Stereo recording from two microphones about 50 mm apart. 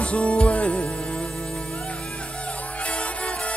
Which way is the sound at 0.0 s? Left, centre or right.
Left.